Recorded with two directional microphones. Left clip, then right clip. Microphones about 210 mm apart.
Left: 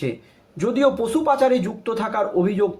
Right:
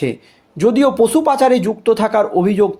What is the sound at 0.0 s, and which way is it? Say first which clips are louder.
Speech: right 7 dB; 45° right (ahead or behind).